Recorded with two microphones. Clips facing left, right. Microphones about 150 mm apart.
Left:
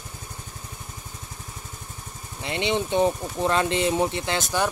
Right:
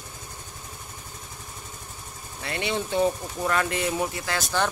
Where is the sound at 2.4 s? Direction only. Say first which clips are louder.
Left 3 dB; 20° left (ahead or behind).